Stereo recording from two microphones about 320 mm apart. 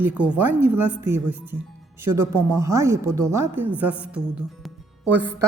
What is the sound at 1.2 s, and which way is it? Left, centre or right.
Speech, right.